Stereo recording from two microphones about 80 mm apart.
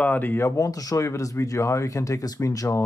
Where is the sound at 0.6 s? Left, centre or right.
Left.